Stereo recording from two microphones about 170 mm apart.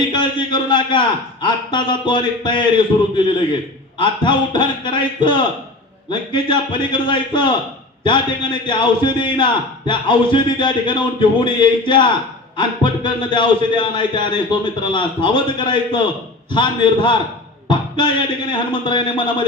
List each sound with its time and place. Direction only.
0.1 s a man's voice: 25° left (ahead or behind)
17.7 s music: 25° left (ahead or behind)
18.5 s a man's voice: 30° left (ahead or behind)